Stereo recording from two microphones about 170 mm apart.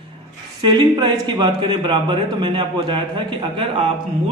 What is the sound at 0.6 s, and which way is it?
A man's voice, 25° right (ahead or behind).